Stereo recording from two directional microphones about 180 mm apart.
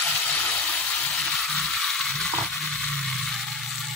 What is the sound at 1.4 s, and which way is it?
Mechanisms, centre (ahead or behind).